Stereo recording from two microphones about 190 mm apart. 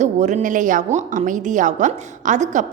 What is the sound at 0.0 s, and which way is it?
A woman's voice, 40° right (ahead or behind).